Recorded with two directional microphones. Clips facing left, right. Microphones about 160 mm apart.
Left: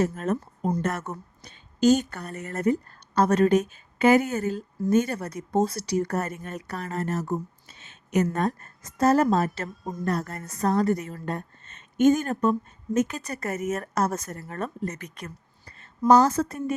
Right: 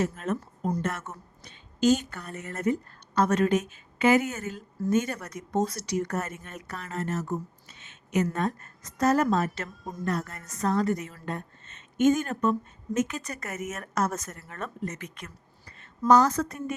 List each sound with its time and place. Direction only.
0.0 s speech: 40° left (ahead or behind)